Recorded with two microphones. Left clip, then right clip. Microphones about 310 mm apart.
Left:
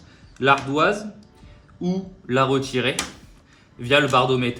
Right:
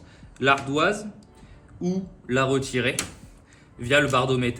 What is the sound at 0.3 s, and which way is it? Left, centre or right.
A man's voice, centre.